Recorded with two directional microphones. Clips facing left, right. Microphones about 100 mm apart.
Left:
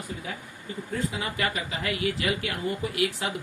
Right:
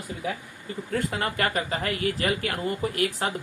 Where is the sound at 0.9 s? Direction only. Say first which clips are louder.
Right 3 dB; 65° right (ahead or behind).